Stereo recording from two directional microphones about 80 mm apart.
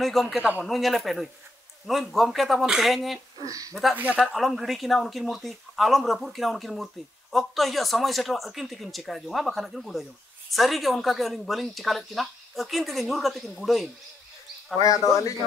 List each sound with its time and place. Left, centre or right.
0.0 s speech: centre
0.4 s a man's voice: centre
0.7 s speech: centre
3.3 s speech: right
3.9 s speech: centre
4.2 s speech: centre